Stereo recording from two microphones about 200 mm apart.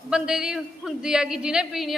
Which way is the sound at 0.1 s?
5° right (ahead or behind).